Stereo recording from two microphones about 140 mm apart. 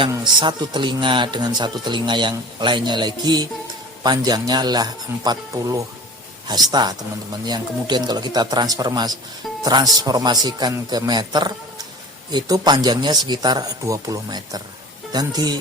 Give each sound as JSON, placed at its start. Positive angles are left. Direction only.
{"t": 0.0, "sound": "speech", "side_deg": -35}